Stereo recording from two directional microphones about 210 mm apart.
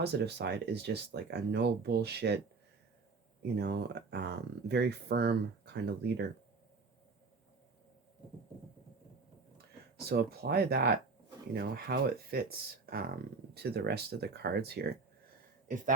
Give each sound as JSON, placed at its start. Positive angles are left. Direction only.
{"t": 0.0, "sound": "speech", "side_deg": -50}
{"t": 3.4, "sound": "speech", "side_deg": -50}
{"t": 9.6, "sound": "speech", "side_deg": -50}